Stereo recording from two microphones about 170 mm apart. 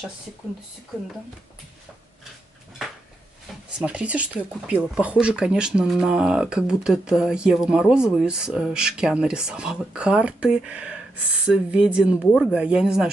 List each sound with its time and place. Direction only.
3.7 s speech: 5° right (ahead or behind)